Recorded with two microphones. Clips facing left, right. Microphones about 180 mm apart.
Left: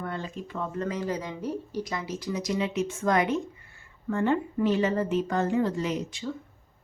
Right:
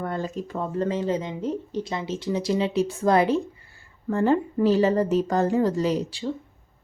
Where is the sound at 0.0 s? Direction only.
40° right (ahead or behind).